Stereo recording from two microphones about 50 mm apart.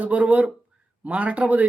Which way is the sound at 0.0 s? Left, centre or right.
Right.